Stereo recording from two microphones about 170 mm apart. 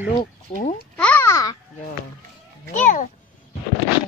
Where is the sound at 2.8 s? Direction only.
45° left (ahead or behind).